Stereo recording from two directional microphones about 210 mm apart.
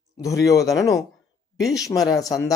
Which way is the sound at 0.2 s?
15° left (ahead or behind).